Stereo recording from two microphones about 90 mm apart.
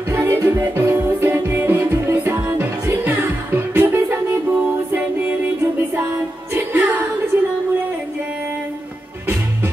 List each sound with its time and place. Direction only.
0.1 s music: 30° right (ahead or behind)
6.5 s music: 20° right (ahead or behind)